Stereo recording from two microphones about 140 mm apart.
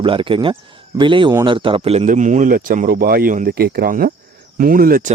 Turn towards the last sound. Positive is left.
turn(degrees=-90)